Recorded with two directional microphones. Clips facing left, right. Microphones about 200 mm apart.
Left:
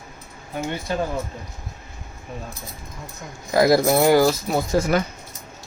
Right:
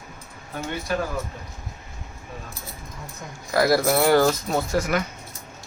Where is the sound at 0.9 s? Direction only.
25° left (ahead or behind).